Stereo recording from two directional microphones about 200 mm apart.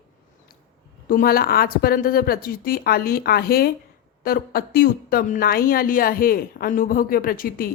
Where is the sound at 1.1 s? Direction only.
45° left (ahead or behind).